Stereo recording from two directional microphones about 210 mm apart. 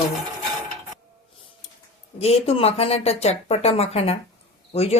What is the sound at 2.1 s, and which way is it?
Speech, 30° left (ahead or behind).